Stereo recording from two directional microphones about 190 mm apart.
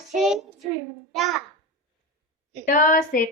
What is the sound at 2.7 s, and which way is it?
Speech, 45° left (ahead or behind).